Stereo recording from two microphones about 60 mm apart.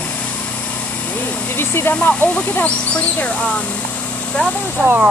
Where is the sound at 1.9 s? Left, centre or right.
Left.